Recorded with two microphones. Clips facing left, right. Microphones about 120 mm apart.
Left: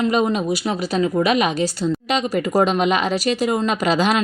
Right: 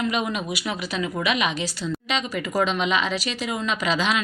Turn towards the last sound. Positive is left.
turn(degrees=45)  # may be behind; listen again after turning